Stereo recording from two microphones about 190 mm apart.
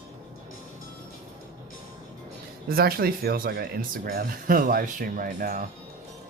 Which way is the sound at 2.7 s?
50° right (ahead or behind).